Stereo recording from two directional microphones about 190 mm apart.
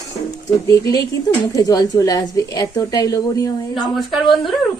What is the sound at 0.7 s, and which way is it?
A woman's voice, 20° left (ahead or behind).